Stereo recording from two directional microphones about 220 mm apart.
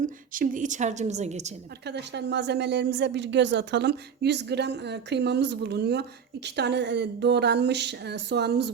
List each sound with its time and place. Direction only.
0.0 s a woman's voice: 35° right (ahead or behind)
1.8 s speech: 50° right (ahead or behind)